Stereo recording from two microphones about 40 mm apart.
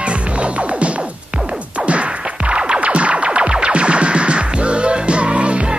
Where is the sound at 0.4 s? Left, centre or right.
Right.